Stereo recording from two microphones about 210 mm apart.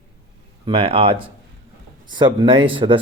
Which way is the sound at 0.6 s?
25° right (ahead or behind).